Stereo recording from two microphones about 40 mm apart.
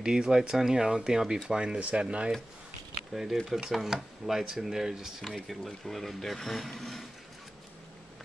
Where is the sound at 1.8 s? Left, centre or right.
Right.